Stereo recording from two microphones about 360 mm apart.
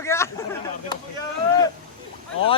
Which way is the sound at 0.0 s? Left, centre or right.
Centre.